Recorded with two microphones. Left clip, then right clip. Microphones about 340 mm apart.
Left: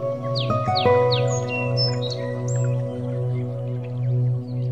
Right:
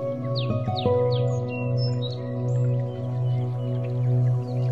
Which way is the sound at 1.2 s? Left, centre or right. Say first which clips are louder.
Left 5 dB; left.